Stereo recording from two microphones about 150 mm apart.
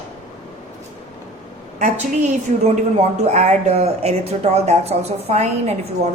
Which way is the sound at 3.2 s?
50° right (ahead or behind).